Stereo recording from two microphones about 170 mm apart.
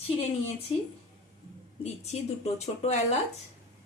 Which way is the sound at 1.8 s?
40° left (ahead or behind).